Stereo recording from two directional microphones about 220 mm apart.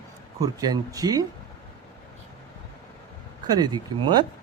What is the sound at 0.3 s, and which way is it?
Speech, 15° right (ahead or behind).